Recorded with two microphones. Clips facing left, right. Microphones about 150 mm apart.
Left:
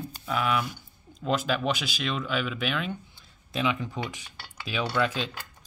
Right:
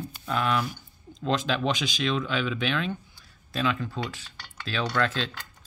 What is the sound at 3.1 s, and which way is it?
Speech, 20° left (ahead or behind).